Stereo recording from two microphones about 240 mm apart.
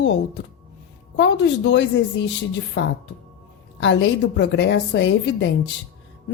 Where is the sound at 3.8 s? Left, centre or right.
Left.